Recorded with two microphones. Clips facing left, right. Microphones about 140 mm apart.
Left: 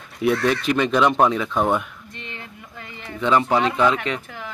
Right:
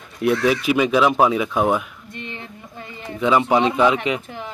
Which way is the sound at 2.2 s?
30° right (ahead or behind).